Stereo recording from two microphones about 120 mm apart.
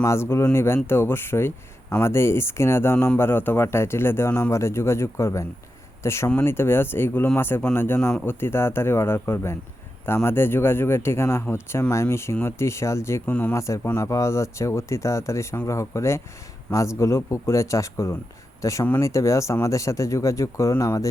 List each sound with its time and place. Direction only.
0.0 s speech: 20° left (ahead or behind)